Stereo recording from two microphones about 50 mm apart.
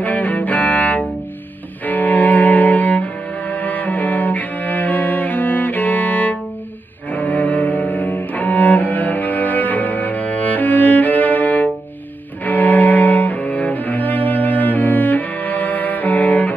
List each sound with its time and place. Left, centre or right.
0.0 s cello: left